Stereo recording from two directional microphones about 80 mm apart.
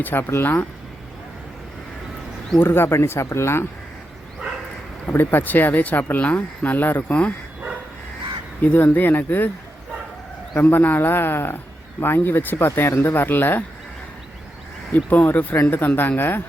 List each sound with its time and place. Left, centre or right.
0.0 s speech: left
2.6 s speech: left
5.0 s speech: left
8.6 s speech: left
10.5 s speech: left
14.9 s speech: left